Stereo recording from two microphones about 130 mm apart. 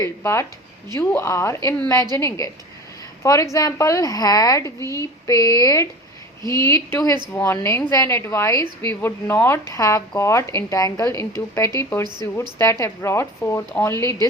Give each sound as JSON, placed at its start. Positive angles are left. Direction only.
{"t": 0.0, "sound": "speech", "side_deg": 20}